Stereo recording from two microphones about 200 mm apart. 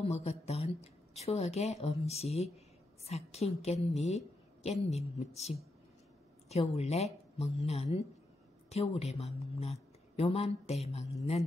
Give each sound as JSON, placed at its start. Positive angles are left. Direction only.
{"t": 0.0, "sound": "speech", "side_deg": 30}
{"t": 6.5, "sound": "a woman's voice", "side_deg": 30}